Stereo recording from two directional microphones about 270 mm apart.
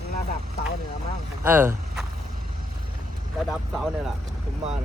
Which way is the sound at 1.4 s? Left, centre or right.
Centre.